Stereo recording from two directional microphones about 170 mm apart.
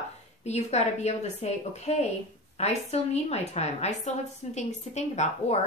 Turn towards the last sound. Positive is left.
turn(degrees=40)  # may be behind; listen again after turning